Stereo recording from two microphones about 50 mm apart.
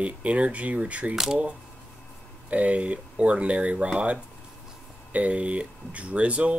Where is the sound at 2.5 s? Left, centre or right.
Right.